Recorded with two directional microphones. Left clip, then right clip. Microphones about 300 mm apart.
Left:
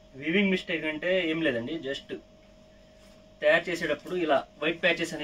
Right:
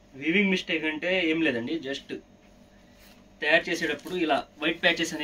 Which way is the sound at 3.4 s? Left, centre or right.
Centre.